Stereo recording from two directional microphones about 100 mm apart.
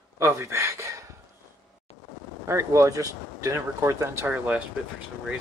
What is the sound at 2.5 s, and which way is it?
Speech, 30° right (ahead or behind).